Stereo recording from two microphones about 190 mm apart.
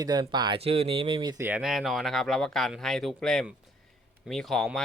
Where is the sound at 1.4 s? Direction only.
5° right (ahead or behind).